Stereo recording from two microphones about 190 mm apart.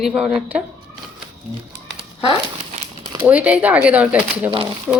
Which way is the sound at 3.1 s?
10° right (ahead or behind).